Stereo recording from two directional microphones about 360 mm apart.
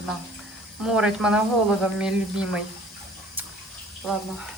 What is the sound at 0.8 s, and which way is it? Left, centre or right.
A woman's voice, centre.